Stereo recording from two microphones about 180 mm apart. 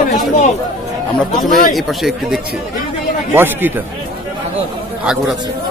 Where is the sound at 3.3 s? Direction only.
10° right (ahead or behind).